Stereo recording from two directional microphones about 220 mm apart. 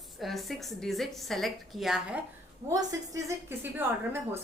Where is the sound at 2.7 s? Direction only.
15° right (ahead or behind).